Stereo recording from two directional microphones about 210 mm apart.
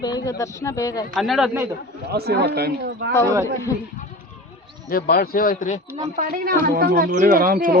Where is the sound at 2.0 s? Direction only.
50° right (ahead or behind).